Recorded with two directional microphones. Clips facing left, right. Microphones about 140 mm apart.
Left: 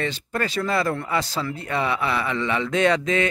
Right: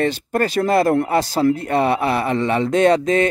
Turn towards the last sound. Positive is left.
turn(degrees=-40)  # may be behind; listen again after turning